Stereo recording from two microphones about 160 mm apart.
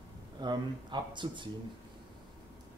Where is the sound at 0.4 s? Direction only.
30° right (ahead or behind).